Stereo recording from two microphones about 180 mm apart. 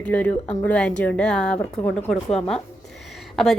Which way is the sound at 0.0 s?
10° left (ahead or behind).